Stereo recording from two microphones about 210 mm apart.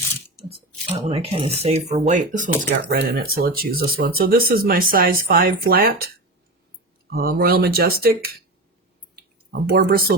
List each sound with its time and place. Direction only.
0.5 s speech: 30° right (ahead or behind); by 6.1 s 45° right (ahead or behind)
7.1 s speech: 45° right (ahead or behind)
9.1 s a sound: 45° right (ahead or behind)